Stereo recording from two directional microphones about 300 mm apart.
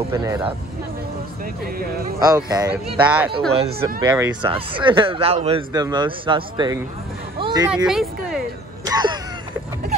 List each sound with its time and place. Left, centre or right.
0.1 s speech: centre
1.8 s speech: right
2.1 s speech: centre
3.5 s speech: centre
7.3 s a sound: centre
7.8 s speech: centre
8.8 s throat clearing: centre